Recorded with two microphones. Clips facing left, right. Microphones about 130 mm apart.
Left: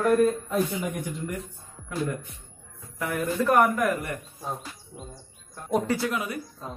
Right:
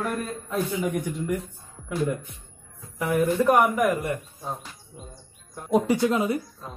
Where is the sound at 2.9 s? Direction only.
20° right (ahead or behind).